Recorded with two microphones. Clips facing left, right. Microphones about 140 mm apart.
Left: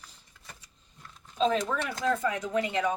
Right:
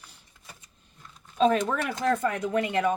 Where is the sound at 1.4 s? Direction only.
60° right (ahead or behind).